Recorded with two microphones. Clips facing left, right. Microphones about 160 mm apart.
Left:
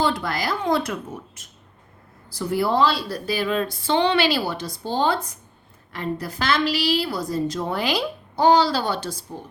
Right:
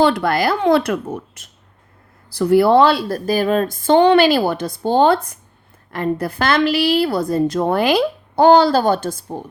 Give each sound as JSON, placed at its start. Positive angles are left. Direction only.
{"t": 0.0, "sound": "speech", "side_deg": -65}
{"t": 2.3, "sound": "a woman's voice", "side_deg": -70}